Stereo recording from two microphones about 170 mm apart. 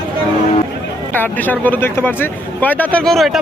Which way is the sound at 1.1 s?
10° left (ahead or behind).